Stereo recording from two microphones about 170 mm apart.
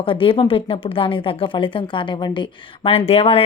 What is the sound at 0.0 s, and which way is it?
A woman's voice, 30° left (ahead or behind).